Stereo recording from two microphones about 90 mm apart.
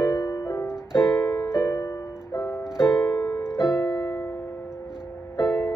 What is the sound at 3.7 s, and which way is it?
Music, 45° left (ahead or behind).